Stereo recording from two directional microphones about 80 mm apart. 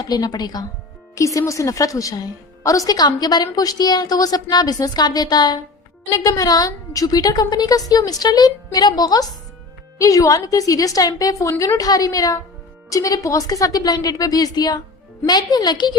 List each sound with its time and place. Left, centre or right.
0.0 s a woman's voice: left
1.1 s a woman's voice: left
6.1 s a woman's voice: left
10.0 s a woman's voice: left